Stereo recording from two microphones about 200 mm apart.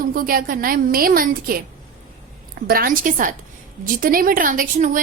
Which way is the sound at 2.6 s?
45° right (ahead or behind).